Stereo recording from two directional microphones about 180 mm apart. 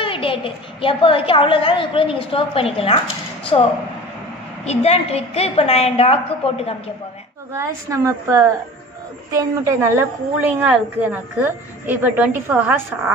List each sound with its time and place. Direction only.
0.0 s a woman's voice: 30° left (ahead or behind)
7.5 s a woman's voice: 15° right (ahead or behind)